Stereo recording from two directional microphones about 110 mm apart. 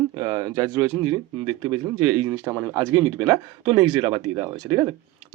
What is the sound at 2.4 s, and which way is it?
Speech, 15° right (ahead or behind).